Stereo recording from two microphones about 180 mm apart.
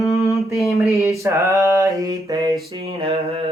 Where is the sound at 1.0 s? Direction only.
15° right (ahead or behind).